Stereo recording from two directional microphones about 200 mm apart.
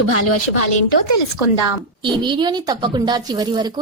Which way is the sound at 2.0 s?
25° right (ahead or behind).